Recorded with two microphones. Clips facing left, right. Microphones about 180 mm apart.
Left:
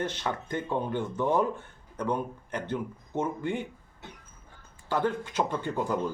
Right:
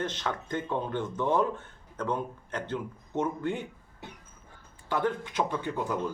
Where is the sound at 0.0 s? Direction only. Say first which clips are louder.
Left 1 dB; 10° left (ahead or behind).